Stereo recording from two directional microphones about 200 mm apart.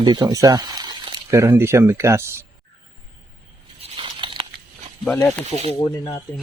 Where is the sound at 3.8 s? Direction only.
25° right (ahead or behind).